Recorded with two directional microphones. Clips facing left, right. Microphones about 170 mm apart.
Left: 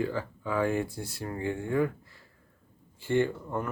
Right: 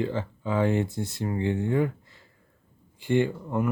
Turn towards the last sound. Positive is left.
turn(degrees=-15)  # may be behind; listen again after turning